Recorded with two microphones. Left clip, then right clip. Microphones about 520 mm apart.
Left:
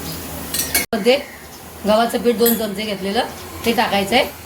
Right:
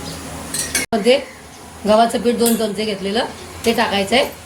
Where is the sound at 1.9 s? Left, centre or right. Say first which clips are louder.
Right 2 dB; left.